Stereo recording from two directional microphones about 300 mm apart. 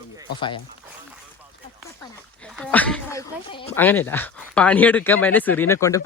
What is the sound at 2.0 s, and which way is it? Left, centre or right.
Speech, centre.